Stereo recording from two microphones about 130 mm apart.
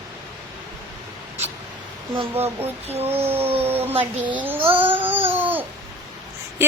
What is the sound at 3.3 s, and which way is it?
A woman's voice, 15° right (ahead or behind).